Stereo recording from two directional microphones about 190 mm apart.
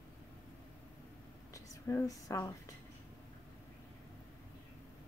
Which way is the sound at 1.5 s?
15° left (ahead or behind).